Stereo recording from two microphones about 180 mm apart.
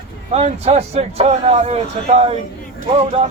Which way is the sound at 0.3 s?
35° right (ahead or behind).